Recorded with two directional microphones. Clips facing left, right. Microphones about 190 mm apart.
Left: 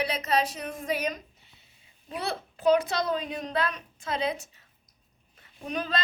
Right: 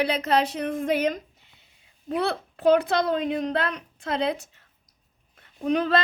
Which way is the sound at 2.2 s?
60° right (ahead or behind).